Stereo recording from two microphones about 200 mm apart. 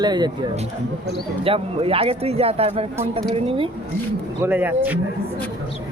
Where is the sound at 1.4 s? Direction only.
30° right (ahead or behind).